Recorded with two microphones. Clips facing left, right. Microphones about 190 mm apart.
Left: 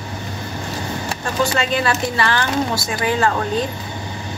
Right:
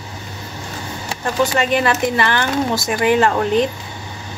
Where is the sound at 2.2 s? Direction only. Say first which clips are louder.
Right 1 dB; 20° right (ahead or behind).